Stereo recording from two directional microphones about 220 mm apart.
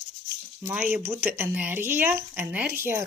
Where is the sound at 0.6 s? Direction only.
10° right (ahead or behind).